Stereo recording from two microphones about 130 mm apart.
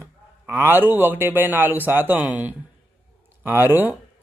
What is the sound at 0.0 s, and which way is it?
A man's voice, 20° right (ahead or behind).